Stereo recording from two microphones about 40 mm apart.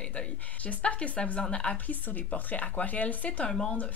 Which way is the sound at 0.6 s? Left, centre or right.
Left.